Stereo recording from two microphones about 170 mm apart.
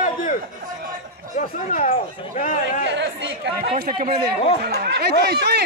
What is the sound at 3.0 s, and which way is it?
Speech, 90° right.